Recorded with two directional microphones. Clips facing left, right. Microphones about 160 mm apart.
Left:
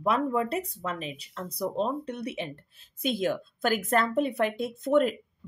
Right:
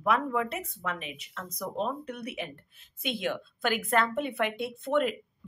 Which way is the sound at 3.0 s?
40° left (ahead or behind).